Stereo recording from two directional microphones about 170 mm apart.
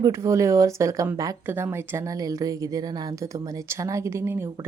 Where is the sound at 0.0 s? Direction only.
15° right (ahead or behind).